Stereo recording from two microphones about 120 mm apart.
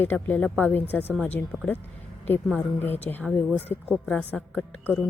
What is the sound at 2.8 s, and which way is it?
A woman's voice, 15° left (ahead or behind).